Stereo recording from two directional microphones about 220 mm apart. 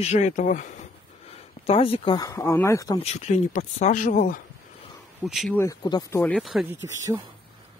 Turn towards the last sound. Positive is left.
turn(degrees=-15)  # may be behind; listen again after turning